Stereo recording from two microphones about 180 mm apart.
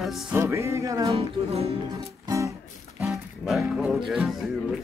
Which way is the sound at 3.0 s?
Centre (ahead or behind).